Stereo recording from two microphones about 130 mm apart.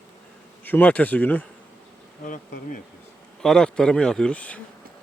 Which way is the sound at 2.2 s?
90° left.